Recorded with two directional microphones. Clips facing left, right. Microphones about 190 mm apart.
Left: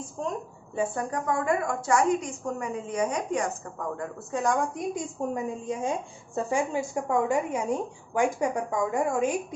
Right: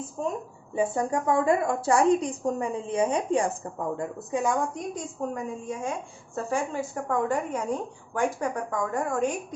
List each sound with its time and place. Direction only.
0.2 s a woman's voice: 5° right (ahead or behind)
0.8 s a woman's voice: 25° right (ahead or behind)
5.3 s a woman's voice: 20° left (ahead or behind)